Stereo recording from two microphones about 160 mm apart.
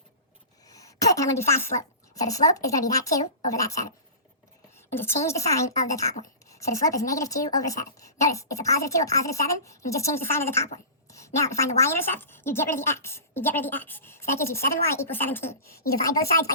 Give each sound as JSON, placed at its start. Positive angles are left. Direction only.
{"t": 0.6, "sound": "a sound", "side_deg": 20}
{"t": 2.2, "sound": "speech", "side_deg": 20}
{"t": 4.9, "sound": "a woman's voice", "side_deg": 15}